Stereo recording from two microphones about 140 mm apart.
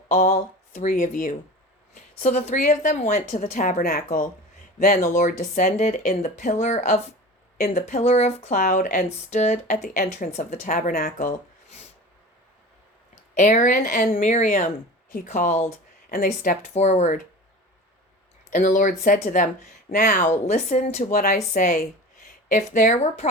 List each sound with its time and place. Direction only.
0.1 s a woman's voice: 60° left (ahead or behind); by 4.3 s 85° left
5.0 s a woman's voice: 60° left (ahead or behind)
8.5 s speech: 65° left (ahead or behind)
9.3 s a woman's voice: 55° left (ahead or behind); by 11.3 s 75° left (ahead or behind)
13.3 s a woman's voice: 55° left (ahead or behind)
16.1 s speech: 80° left
16.7 s a woman's voice: 55° left (ahead or behind)
18.5 s a woman's voice: 65° left (ahead or behind)
19.9 s a woman's voice: 75° left (ahead or behind); by 23.3 s 55° left (ahead or behind)